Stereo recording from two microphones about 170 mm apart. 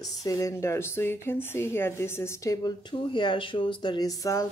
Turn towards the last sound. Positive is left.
turn(degrees=20)  # may be behind; listen again after turning